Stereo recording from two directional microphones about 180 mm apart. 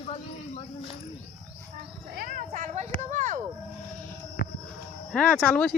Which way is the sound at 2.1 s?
45° right (ahead or behind).